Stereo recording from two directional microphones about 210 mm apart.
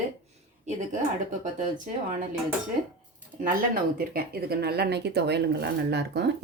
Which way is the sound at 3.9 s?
45° right (ahead or behind).